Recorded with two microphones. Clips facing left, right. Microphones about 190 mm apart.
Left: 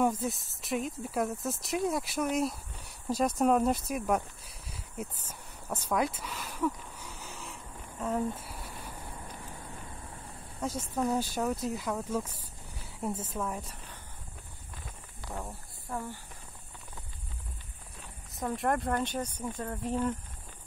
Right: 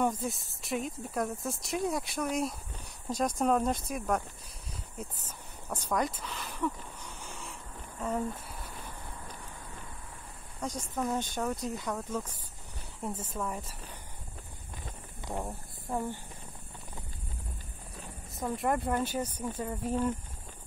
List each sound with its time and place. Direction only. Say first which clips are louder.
0.0 s speech: left 2 dB; centre (ahead or behind)
5.7 s a sound: left 1 dB; 5° left (ahead or behind)
10.6 s speech: left 2 dB; 5° left (ahead or behind)
15.2 s speech: right 3 dB; 20° right (ahead or behind)
18.3 s speech: even; centre (ahead or behind)